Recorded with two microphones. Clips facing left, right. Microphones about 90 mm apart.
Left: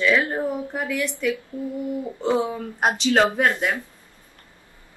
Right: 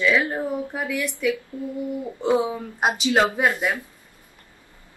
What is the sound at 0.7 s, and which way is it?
Speech, 5° right (ahead or behind).